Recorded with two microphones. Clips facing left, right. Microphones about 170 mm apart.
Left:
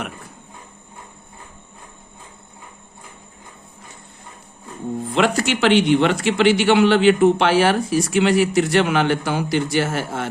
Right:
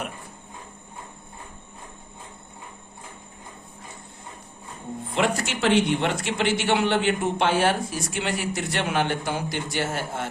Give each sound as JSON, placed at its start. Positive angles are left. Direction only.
{"t": 5.1, "sound": "a man's voice", "side_deg": 90}